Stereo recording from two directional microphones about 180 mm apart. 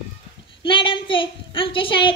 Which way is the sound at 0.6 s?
30° left (ahead or behind).